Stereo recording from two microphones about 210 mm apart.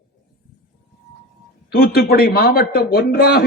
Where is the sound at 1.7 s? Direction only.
50° left (ahead or behind).